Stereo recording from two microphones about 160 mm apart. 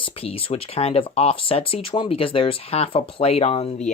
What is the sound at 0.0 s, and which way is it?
Speech, 35° left (ahead or behind).